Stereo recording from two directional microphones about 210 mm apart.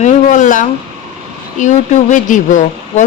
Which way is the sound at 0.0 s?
35° left (ahead or behind).